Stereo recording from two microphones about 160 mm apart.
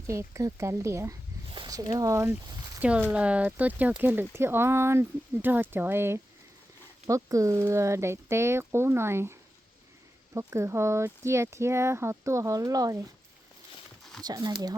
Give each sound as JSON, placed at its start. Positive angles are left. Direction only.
{"t": 0.1, "sound": "speech", "side_deg": -20}
{"t": 14.0, "sound": "a sound", "side_deg": 0}
{"t": 14.3, "sound": "speech", "side_deg": -25}